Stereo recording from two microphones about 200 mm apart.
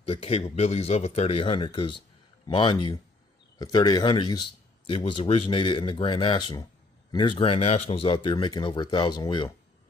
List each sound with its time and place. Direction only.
0.0 s speech: 30° left (ahead or behind)